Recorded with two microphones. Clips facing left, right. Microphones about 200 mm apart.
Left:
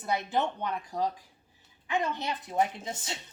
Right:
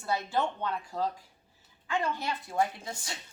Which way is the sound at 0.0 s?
20° left (ahead or behind).